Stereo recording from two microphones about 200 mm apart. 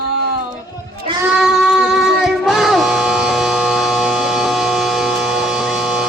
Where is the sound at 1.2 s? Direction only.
5° right (ahead or behind).